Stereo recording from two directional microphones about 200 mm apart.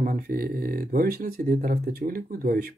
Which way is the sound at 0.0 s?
45° right (ahead or behind).